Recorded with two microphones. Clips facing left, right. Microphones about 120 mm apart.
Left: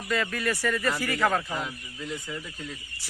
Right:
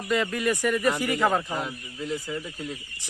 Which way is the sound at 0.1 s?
20° right (ahead or behind).